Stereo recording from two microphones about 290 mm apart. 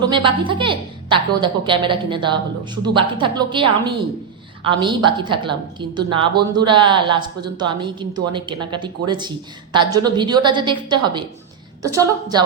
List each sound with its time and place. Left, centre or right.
0.0 s a woman's voice: centre